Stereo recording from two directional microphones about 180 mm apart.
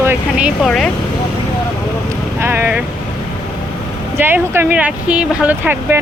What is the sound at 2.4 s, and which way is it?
Speech, 10° right (ahead or behind).